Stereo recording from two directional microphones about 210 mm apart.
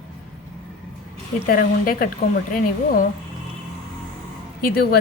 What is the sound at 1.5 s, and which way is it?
A woman's voice, 45° left (ahead or behind).